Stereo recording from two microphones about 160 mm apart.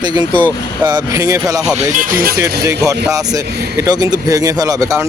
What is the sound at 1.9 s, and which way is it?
Speech, 55° right (ahead or behind).